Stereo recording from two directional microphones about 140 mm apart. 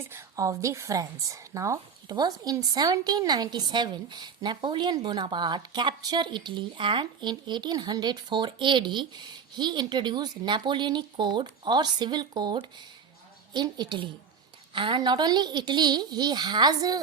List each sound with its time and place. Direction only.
0.0 s a woman's voice: 20° right (ahead or behind)